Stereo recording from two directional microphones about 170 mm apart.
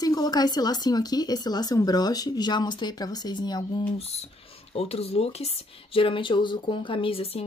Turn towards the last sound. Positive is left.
turn(degrees=35)  # may be behind; listen again after turning